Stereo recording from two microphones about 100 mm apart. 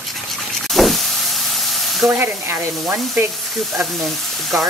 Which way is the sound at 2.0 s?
30° right (ahead or behind).